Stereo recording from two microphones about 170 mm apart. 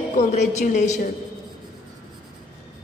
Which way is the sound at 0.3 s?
40° left (ahead or behind).